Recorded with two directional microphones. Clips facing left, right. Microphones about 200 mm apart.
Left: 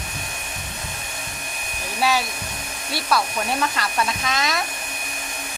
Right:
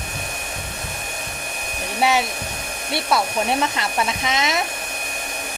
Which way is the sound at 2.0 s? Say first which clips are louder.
Right 2 dB; 20° right (ahead or behind).